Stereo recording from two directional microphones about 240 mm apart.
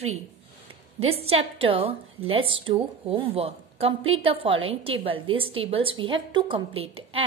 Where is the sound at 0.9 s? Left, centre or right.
Right.